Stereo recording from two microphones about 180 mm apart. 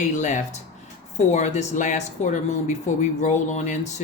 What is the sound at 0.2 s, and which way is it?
Speech, 40° left (ahead or behind).